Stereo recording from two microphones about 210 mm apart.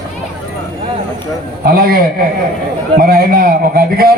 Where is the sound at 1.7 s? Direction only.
45° right (ahead or behind).